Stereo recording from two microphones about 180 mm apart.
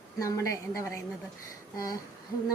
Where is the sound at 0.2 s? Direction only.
15° left (ahead or behind).